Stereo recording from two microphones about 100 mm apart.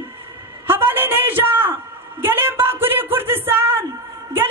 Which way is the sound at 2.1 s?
20° right (ahead or behind).